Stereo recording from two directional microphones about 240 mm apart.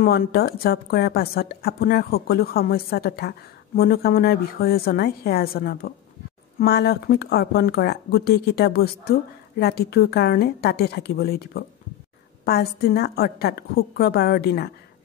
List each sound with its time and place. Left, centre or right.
0.0 s a woman's voice: left